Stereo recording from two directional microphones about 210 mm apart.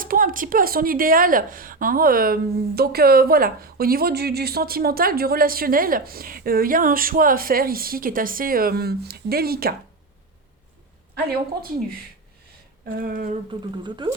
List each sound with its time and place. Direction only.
0.0 s a woman's voice: 40° right (ahead or behind)
13.0 s a woman's voice: 45° right (ahead or behind)
13.5 s speech: 20° right (ahead or behind)